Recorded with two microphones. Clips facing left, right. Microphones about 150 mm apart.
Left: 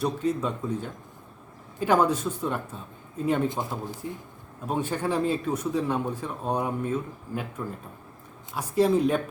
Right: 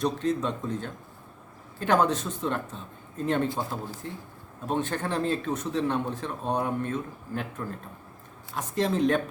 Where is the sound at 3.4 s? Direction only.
20° left (ahead or behind).